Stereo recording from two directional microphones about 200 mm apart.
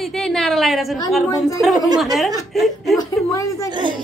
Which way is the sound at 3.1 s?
15° left (ahead or behind).